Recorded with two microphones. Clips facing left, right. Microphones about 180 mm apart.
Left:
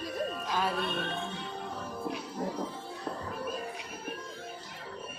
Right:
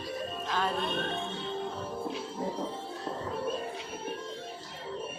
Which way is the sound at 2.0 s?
25° right (ahead or behind).